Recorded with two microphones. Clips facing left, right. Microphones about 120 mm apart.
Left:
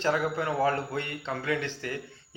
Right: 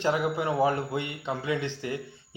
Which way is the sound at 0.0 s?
15° right (ahead or behind).